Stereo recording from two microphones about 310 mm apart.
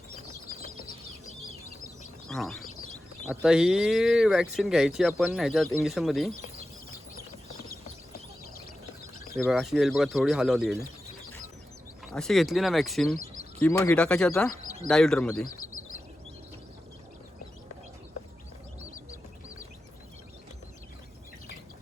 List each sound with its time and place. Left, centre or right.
2.2 s speech: centre
9.3 s speech: centre
12.1 s speech: centre
15.4 s bird: left